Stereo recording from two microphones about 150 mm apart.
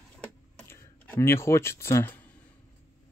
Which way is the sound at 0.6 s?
15° left (ahead or behind).